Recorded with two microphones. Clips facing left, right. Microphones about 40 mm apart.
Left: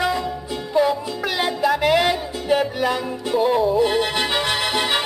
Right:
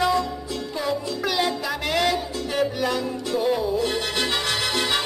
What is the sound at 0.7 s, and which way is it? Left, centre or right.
Music, centre.